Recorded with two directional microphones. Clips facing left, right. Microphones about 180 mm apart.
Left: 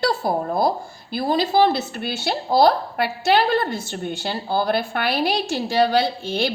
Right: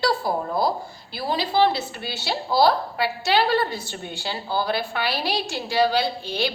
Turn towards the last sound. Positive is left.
turn(degrees=50)  # may be behind; listen again after turning